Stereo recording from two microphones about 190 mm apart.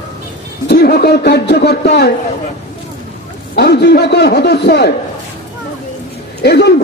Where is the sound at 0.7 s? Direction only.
55° left (ahead or behind).